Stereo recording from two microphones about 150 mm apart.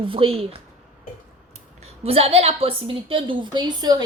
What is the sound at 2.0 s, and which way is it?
A woman's voice, 40° right (ahead or behind).